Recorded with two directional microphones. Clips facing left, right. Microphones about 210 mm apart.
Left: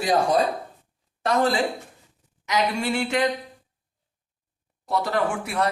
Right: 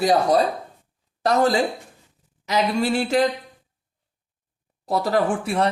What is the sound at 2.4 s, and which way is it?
Speech, 35° right (ahead or behind).